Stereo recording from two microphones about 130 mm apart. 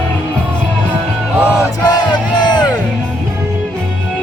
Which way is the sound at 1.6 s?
35° left (ahead or behind).